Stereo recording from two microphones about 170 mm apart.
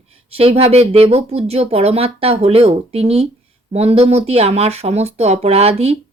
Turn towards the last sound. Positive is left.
turn(degrees=-35)  # may be behind; listen again after turning